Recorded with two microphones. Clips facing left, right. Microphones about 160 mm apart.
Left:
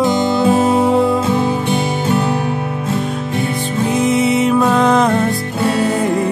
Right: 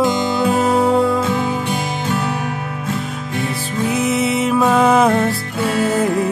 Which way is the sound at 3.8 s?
Centre (ahead or behind).